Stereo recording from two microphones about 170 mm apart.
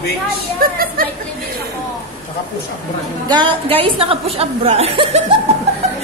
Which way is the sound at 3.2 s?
25° right (ahead or behind).